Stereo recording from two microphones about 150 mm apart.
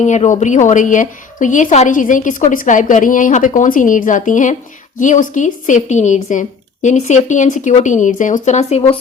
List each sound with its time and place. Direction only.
0.0 s a woman's voice: 55° left (ahead or behind)